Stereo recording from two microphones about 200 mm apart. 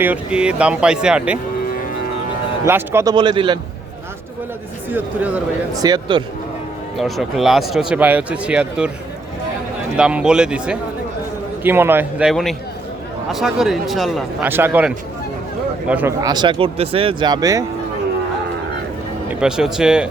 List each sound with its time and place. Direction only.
0.0 s speech: 5° right (ahead or behind)
2.6 s speech: 10° right (ahead or behind)
4.9 s a man's voice: 10° right (ahead or behind)
5.8 s speech: 20° right (ahead or behind)
6.9 s speech: centre (ahead or behind)
10.0 s a man's voice: 5° right (ahead or behind)
12.3 s a man's voice: centre (ahead or behind); by 17.7 s 15° right (ahead or behind)
19.3 s speech: 5° right (ahead or behind)